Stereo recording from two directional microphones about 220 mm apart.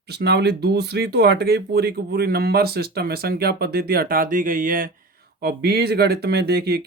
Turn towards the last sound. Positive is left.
turn(degrees=-45)  # may be behind; listen again after turning